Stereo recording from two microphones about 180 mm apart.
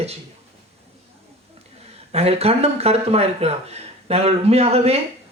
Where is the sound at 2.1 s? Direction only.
35° right (ahead or behind).